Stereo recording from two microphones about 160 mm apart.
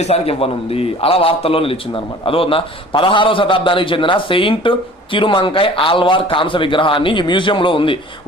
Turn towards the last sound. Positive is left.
turn(degrees=30)  # may be behind; listen again after turning